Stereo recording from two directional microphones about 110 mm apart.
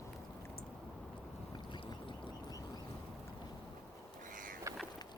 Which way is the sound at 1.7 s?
50° left (ahead or behind).